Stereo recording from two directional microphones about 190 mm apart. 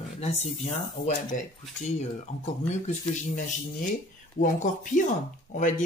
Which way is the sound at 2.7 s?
40° left (ahead or behind).